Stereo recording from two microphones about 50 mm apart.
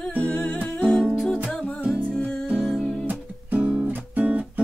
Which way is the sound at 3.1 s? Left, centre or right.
Right.